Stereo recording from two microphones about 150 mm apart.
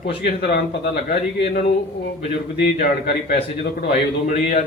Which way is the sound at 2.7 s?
60° left (ahead or behind).